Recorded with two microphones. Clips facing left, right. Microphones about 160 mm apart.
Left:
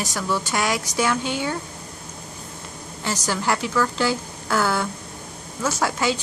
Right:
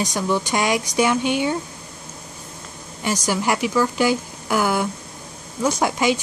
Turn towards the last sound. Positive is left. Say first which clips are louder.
# right 3 dB
turn(degrees=-15)  # may be behind; listen again after turning